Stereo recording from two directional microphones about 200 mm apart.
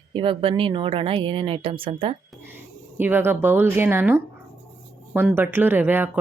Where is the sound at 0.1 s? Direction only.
25° right (ahead or behind).